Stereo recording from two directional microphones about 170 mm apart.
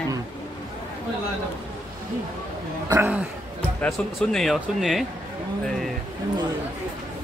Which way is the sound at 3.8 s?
5° left (ahead or behind).